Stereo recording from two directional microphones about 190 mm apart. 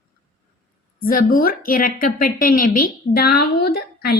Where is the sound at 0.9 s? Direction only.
50° left (ahead or behind).